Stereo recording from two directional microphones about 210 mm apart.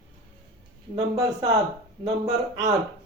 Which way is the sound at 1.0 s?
25° right (ahead or behind).